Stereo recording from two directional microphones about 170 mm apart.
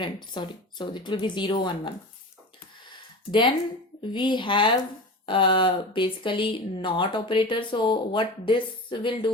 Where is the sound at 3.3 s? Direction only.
25° left (ahead or behind).